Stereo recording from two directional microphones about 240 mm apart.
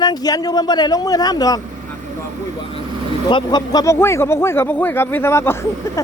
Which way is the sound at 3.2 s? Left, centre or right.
Centre.